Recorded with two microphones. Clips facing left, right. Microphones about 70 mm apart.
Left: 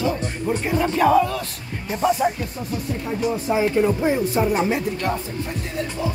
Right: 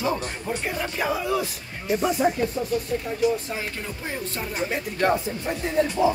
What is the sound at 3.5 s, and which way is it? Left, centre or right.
Speech, centre.